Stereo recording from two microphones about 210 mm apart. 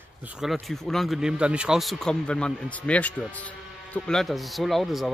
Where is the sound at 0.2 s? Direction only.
5° right (ahead or behind).